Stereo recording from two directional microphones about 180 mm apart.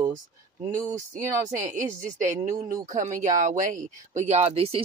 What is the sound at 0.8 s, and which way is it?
Speech, 45° right (ahead or behind).